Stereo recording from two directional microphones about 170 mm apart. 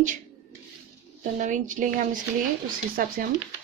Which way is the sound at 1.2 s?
45° right (ahead or behind).